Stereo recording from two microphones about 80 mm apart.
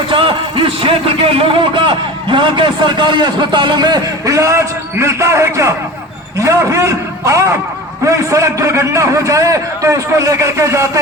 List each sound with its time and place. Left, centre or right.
0.1 s a sound: right
1.5 s a man's voice: right
4.3 s a man's voice: right